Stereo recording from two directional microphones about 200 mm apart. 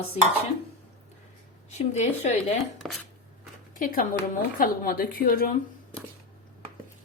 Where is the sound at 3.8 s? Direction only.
45° left (ahead or behind).